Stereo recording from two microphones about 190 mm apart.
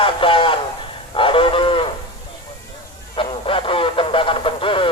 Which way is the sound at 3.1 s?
30° left (ahead or behind).